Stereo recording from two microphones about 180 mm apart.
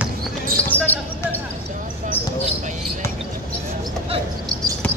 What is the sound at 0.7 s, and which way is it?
Basketball bounce, 10° left (ahead or behind).